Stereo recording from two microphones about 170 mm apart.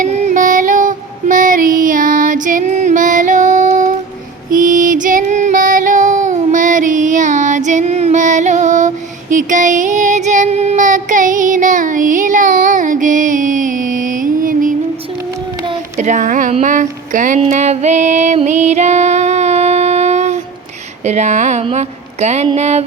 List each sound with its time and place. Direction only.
0.0 s female singing: 45° right (ahead or behind)
4.5 s child singing: 50° right (ahead or behind)
16.0 s speech: 45° right (ahead or behind)
17.4 s music: 40° right (ahead or behind)
21.0 s speech: 40° right (ahead or behind)